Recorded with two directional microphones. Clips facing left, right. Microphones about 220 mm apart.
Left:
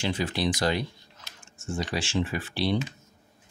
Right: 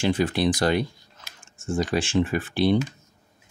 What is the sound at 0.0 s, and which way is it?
Speech, 50° right (ahead or behind).